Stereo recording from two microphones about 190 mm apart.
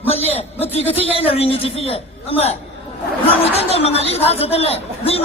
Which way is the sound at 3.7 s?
30° left (ahead or behind).